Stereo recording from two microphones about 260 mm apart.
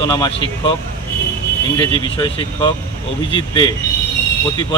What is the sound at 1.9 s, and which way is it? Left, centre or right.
Speech, centre.